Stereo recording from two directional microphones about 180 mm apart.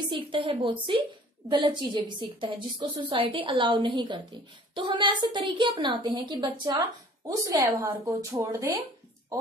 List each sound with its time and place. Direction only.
0.1 s a woman's voice: 30° right (ahead or behind)